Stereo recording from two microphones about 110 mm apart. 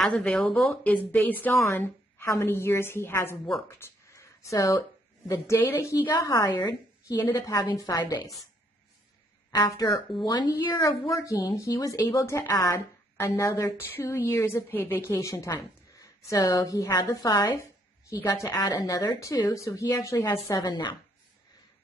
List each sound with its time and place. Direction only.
0.0 s a woman's voice: 10° left (ahead or behind)
3.6 s a sound: 20° left (ahead or behind)
5.3 s a woman's voice: 30° left (ahead or behind)
9.5 s a woman's voice: 35° left (ahead or behind)